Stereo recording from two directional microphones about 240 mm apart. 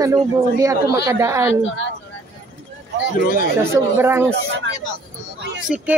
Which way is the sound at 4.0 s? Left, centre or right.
Centre.